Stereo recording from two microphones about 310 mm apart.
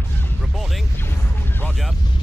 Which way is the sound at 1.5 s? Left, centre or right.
Centre.